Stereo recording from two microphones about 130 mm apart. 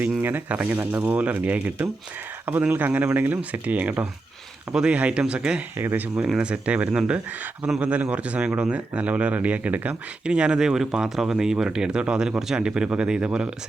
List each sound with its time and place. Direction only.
0.2 s speech: 15° right (ahead or behind)